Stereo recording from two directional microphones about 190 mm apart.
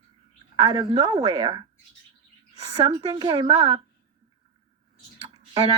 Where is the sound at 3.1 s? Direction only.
20° right (ahead or behind).